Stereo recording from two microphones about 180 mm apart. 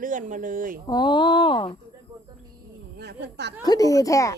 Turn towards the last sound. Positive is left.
turn(degrees=20)  # may be behind; listen again after turning